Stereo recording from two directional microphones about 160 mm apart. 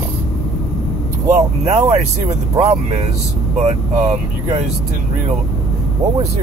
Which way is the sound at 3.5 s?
50° right (ahead or behind).